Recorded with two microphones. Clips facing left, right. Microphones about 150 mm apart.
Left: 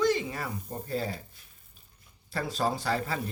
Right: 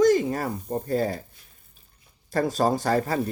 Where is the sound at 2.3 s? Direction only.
45° right (ahead or behind).